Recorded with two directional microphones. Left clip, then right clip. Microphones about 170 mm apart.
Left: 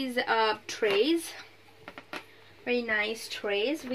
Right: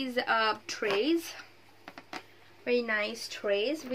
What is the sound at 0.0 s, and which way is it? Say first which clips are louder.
Speech: left 1 dB; centre (ahead or behind).